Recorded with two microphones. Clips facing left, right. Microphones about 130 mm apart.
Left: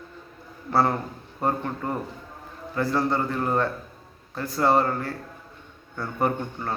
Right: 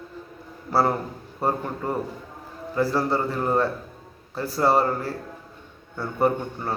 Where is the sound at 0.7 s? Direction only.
5° right (ahead or behind).